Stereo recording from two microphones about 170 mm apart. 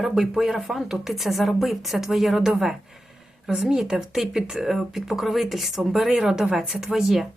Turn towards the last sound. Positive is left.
turn(degrees=0)  # may be behind; listen again after turning